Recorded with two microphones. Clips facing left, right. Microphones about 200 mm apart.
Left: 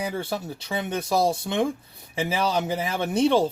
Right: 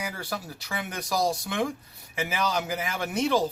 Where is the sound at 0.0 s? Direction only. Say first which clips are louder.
Left 6 dB; 25° left (ahead or behind).